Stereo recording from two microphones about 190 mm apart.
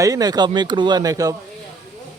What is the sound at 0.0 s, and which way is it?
Speech, 20° right (ahead or behind).